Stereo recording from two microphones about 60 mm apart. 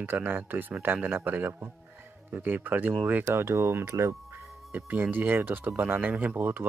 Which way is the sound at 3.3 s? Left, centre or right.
Right.